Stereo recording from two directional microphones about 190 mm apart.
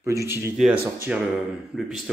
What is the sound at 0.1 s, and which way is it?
Speech, 15° right (ahead or behind).